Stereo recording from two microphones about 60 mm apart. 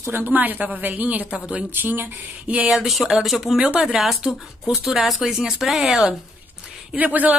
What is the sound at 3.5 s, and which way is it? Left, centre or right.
Speech, centre.